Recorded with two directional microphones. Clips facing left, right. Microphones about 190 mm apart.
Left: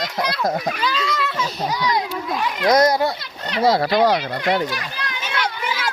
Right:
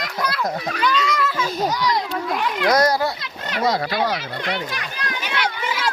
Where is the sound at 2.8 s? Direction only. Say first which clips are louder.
Left 2 dB; 15° left (ahead or behind).